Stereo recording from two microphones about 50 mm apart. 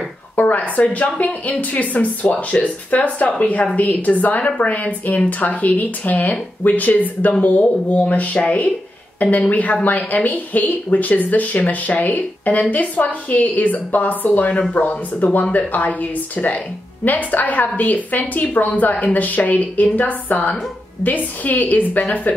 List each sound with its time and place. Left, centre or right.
0.4 s speech: left
14.5 s speech: left